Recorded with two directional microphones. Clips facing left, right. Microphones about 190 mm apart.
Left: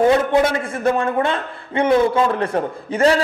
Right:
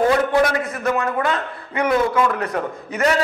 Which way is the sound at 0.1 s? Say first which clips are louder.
Left 2 dB; 25° left (ahead or behind).